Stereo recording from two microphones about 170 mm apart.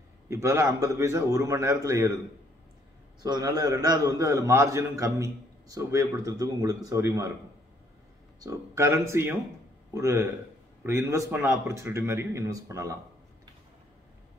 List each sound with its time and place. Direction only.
0.3 s speech: 15° right (ahead or behind)
3.2 s a man's voice: 25° right (ahead or behind)
8.4 s speech: 20° right (ahead or behind)